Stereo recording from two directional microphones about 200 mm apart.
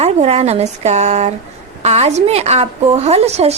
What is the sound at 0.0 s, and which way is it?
A woman's voice, 30° right (ahead or behind).